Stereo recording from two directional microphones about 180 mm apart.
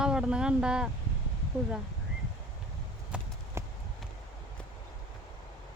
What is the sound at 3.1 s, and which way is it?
Clip-clop, 5° right (ahead or behind).